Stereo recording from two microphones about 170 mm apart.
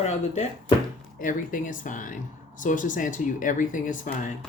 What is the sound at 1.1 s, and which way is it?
Speech, 50° left (ahead or behind).